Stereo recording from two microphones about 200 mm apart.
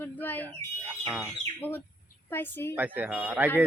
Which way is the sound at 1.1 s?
5° right (ahead or behind).